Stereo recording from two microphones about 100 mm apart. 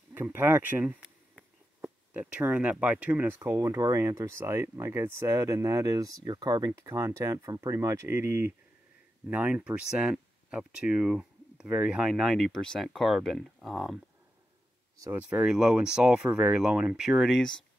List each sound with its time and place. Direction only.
0.1 s speech: 20° right (ahead or behind)
3.3 s speech: 30° right (ahead or behind)
6.8 s speech: 30° right (ahead or behind); by 12.1 s 10° right (ahead or behind)
12.1 s speech: centre (ahead or behind)
15.1 s speech: 10° right (ahead or behind); by 17.6 s 5° left (ahead or behind)